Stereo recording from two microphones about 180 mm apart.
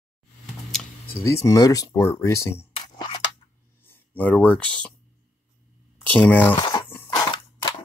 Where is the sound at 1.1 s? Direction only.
15° left (ahead or behind).